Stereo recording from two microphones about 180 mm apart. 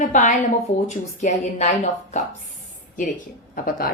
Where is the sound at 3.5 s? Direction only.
55° left (ahead or behind).